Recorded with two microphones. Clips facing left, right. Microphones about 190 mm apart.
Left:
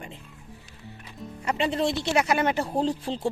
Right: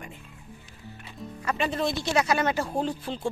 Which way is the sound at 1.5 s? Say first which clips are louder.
Left 2 dB; 30° left (ahead or behind).